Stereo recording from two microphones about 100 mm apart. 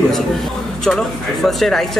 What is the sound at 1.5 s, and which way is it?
Speech, 5° left (ahead or behind).